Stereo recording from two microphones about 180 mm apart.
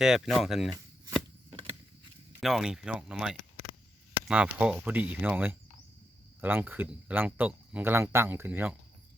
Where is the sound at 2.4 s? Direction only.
Centre (ahead or behind).